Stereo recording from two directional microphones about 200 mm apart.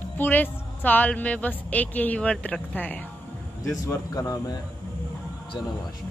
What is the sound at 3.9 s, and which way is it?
Speech, 20° left (ahead or behind).